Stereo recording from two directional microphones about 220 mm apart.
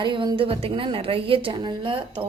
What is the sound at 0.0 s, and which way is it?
A woman's voice, 20° right (ahead or behind).